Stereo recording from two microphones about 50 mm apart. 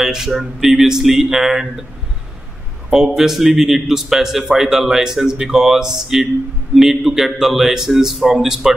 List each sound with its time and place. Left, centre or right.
0.0 s a man's voice: centre
3.2 s a man's voice: centre